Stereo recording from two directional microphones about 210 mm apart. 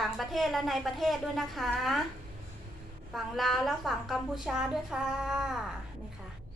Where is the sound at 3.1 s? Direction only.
Centre (ahead or behind).